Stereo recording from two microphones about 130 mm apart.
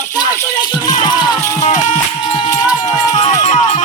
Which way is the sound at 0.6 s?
35° left (ahead or behind).